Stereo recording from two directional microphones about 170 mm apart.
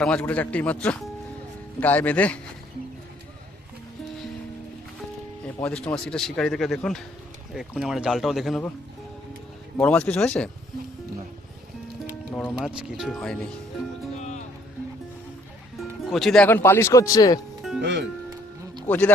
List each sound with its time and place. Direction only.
0.0 s speech: 5° left (ahead or behind)
5.5 s speech: 5° left (ahead or behind)
9.7 s speech: 5° left (ahead or behind)
12.3 s speech: centre (ahead or behind)
14.2 s music: 45° left (ahead or behind)
15.8 s speech: centre (ahead or behind); by 17.4 s 20° left (ahead or behind)
17.7 s speech: 90° right
18.3 s music: 25° right (ahead or behind)
18.9 s speech: 10° left (ahead or behind)